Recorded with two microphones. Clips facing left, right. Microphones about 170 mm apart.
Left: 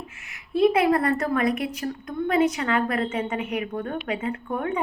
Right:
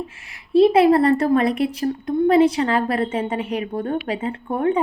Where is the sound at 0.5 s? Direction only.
30° right (ahead or behind).